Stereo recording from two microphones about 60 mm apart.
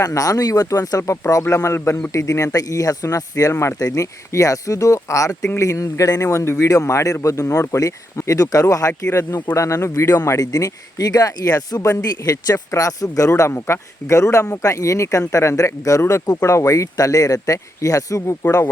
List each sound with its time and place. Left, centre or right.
0.0 s speech: left
2.1 s speech: left
3.5 s speech: left
3.8 s speech: left
6.2 s speech: left
6.7 s speech: left
8.9 s speech: left
10.3 s speech: left
13.5 s speech: left